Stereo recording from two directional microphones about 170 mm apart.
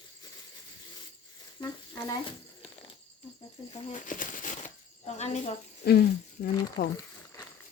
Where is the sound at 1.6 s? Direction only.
20° left (ahead or behind).